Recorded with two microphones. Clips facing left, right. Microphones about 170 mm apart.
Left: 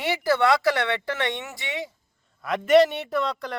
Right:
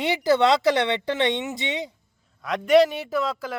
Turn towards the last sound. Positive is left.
turn(degrees=-5)  # may be behind; listen again after turning